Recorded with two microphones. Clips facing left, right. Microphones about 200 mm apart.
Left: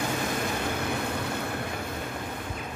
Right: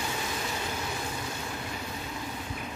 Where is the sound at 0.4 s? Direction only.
55° left (ahead or behind).